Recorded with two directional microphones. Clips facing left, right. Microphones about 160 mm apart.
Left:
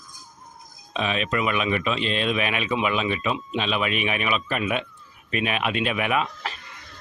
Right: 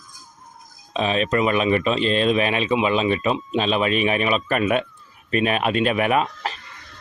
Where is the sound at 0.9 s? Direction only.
35° right (ahead or behind).